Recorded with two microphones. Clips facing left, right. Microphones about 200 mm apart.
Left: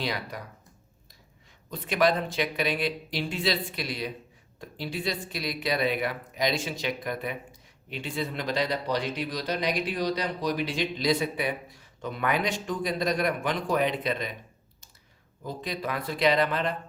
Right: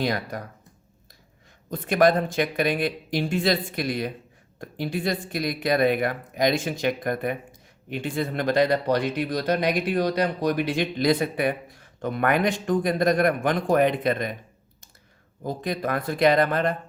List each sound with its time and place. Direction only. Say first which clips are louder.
0.0 s speech: right 6 dB; 45° right (ahead or behind)
1.7 s speech: right 5 dB; 50° right (ahead or behind)
15.4 s speech: right 6 dB; 50° right (ahead or behind)